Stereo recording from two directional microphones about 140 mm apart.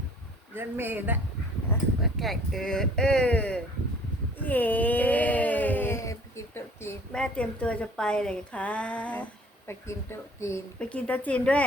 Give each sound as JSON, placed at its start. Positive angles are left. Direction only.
{"t": 0.5, "sound": "a man's voice", "side_deg": -15}
{"t": 2.0, "sound": "speech", "side_deg": 0}
{"t": 4.4, "sound": "a sound", "side_deg": 10}
{"t": 7.1, "sound": "a woman's voice", "side_deg": 5}
{"t": 10.8, "sound": "a woman's voice", "side_deg": 10}